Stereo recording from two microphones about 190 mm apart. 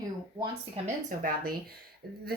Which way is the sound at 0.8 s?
50° right (ahead or behind).